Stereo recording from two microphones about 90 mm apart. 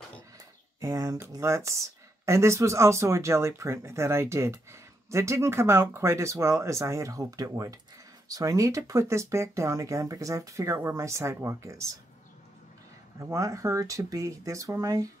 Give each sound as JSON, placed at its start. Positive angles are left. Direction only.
{"t": 0.7, "sound": "speech", "side_deg": -35}
{"t": 13.2, "sound": "speech", "side_deg": -35}